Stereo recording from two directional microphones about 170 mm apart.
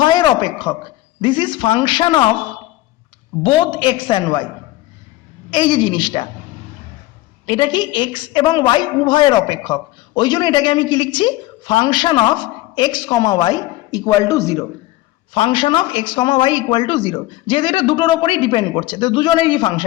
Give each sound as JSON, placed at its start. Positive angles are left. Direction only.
{"t": 0.0, "sound": "a man's voice", "side_deg": 25}
{"t": 3.4, "sound": "a man's voice", "side_deg": 30}
{"t": 5.5, "sound": "a man's voice", "side_deg": 30}
{"t": 7.4, "sound": "a man's voice", "side_deg": 30}
{"t": 15.3, "sound": "a man's voice", "side_deg": 30}